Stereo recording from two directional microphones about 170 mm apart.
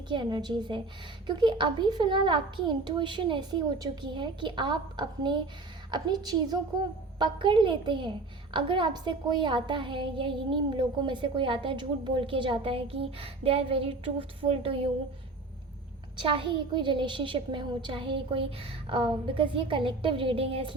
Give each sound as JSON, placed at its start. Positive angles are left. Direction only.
{"t": 0.1, "sound": "a woman's voice", "side_deg": -25}
{"t": 16.1, "sound": "a woman's voice", "side_deg": -30}